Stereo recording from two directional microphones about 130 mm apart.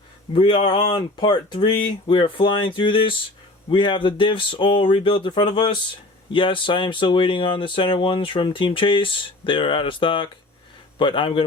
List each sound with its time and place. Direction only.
0.3 s speech: 40° left (ahead or behind)